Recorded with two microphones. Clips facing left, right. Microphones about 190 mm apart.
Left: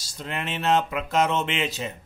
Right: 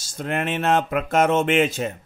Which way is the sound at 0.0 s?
50° right (ahead or behind).